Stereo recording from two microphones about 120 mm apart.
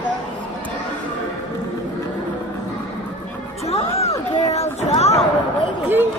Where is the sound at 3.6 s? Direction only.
60° left (ahead or behind).